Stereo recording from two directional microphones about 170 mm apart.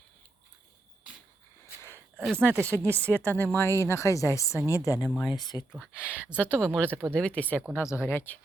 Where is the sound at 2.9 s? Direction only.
10° left (ahead or behind).